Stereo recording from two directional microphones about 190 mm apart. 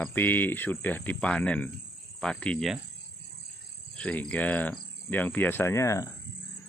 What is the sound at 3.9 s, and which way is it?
Speech, 5° left (ahead or behind).